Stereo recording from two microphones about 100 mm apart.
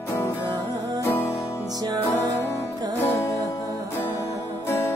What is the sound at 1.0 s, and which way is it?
Music, 25° left (ahead or behind).